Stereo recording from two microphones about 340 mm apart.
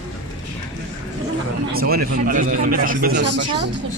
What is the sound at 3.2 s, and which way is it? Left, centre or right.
Speech, right.